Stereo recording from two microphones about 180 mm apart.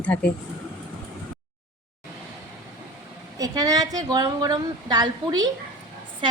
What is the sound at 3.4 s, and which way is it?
A woman's voice, 20° right (ahead or behind).